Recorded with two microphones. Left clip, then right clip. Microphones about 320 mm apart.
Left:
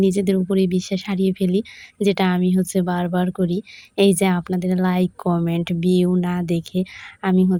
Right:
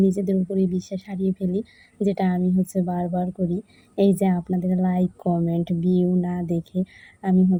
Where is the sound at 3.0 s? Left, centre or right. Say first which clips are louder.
Left 4 dB; left.